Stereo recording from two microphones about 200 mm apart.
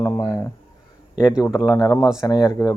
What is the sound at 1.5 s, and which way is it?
Speech, 15° left (ahead or behind).